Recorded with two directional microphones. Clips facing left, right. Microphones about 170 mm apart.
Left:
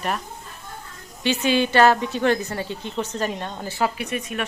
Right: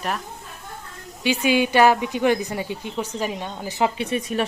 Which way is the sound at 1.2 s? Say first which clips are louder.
Right 1 dB; 10° right (ahead or behind).